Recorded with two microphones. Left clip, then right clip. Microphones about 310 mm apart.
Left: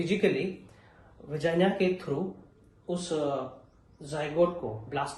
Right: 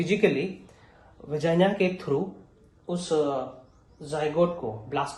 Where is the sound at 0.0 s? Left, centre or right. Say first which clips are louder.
Right 3 dB; right.